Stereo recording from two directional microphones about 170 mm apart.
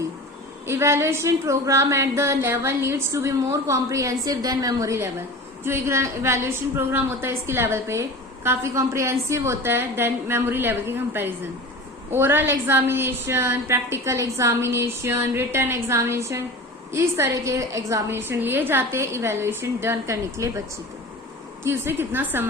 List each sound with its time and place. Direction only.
0.7 s speech: 15° right (ahead or behind)
21.6 s speech: 15° right (ahead or behind)